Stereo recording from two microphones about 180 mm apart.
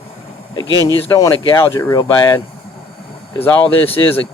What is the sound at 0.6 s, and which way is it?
Speech, 20° left (ahead or behind).